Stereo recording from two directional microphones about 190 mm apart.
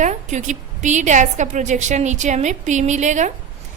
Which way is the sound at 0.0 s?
40° right (ahead or behind).